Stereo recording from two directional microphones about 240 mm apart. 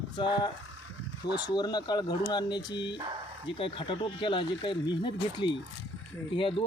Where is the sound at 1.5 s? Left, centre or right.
Centre.